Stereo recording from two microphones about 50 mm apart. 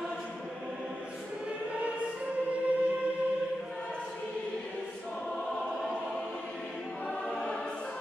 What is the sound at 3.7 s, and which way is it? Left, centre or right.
Choir, centre.